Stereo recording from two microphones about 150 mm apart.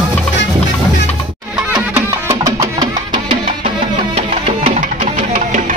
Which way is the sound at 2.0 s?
20° right (ahead or behind).